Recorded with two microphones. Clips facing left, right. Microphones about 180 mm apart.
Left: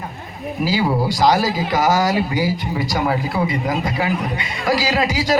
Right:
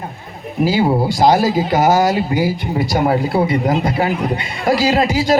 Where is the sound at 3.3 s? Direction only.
35° right (ahead or behind).